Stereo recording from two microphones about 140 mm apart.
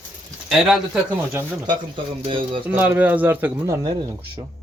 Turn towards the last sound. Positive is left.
turn(degrees=-25)  # may be behind; listen again after turning